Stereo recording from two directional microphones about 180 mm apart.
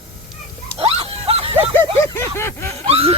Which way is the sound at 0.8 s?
35° right (ahead or behind).